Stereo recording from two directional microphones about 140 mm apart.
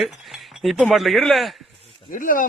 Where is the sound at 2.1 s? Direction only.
75° left (ahead or behind).